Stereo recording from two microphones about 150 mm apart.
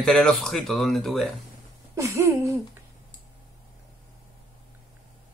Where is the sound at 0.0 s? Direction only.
5° left (ahead or behind).